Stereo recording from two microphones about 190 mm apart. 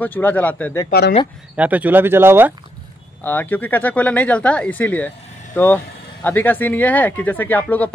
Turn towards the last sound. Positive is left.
turn(degrees=10)  # may be behind; listen again after turning